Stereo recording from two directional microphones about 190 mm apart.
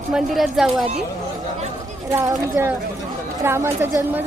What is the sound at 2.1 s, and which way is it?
A woman's voice, 15° right (ahead or behind).